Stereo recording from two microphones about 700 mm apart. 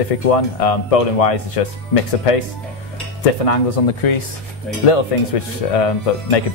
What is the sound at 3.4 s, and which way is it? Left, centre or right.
Speech, left.